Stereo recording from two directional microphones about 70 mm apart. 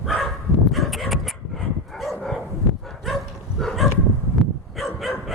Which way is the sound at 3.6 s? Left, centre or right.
Centre.